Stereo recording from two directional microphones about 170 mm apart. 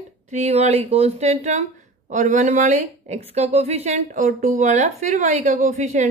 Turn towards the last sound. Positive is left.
turn(degrees=-45)  # may be behind; listen again after turning